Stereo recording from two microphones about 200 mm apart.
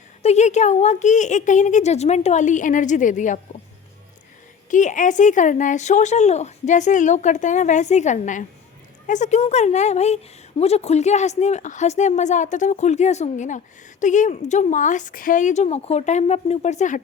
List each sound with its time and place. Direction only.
0.2 s speech: 35° left (ahead or behind)
4.7 s speech: 40° left (ahead or behind)